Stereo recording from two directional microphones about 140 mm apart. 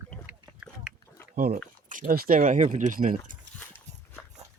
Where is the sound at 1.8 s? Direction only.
80° right.